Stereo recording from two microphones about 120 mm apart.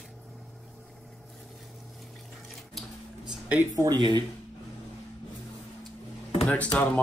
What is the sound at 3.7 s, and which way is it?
Speech, 30° right (ahead or behind).